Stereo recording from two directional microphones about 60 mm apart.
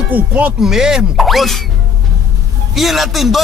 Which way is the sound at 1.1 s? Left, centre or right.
Centre.